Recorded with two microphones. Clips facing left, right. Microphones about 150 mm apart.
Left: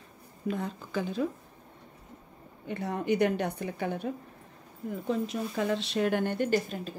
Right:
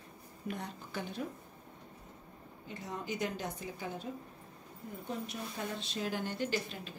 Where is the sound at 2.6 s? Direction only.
65° left (ahead or behind).